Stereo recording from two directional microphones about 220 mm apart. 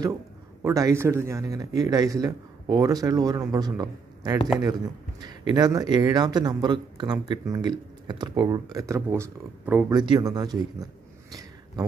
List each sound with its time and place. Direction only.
0.6 s speech: 15° right (ahead or behind)